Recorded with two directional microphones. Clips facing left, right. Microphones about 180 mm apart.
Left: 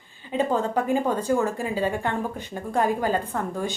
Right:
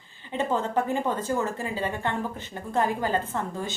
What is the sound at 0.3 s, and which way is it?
A woman's voice, 15° left (ahead or behind).